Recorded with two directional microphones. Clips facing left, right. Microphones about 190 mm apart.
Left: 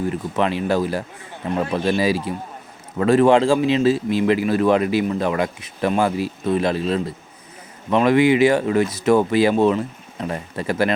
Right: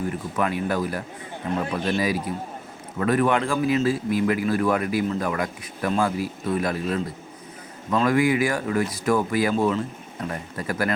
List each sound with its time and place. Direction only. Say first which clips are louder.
0.1 s speech: left 4 dB; 25° left (ahead or behind)